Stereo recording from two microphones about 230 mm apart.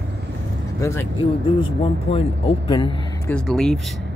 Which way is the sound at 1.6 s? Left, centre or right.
Left.